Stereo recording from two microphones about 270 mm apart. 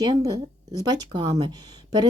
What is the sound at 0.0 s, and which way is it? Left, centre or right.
A woman's voice, centre.